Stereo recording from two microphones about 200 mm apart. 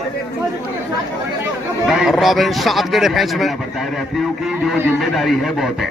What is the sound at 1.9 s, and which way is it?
A man's voice, centre (ahead or behind).